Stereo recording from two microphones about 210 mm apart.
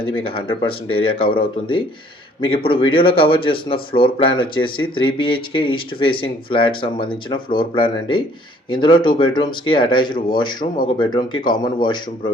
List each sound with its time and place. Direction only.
0.3 s speech: 25° left (ahead or behind)